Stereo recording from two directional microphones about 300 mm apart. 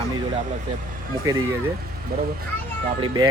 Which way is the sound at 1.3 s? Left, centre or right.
Centre.